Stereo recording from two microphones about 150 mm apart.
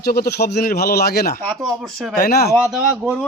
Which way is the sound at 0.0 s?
90° left.